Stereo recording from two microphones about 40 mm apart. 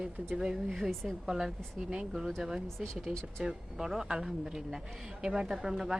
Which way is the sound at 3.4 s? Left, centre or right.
Centre.